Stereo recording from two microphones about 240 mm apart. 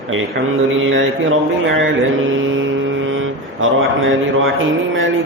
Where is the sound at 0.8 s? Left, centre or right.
Right.